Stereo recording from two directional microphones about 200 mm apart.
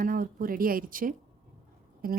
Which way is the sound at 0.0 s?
45° right (ahead or behind).